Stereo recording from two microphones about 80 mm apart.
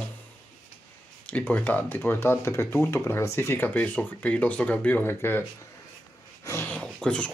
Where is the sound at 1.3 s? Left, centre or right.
Left.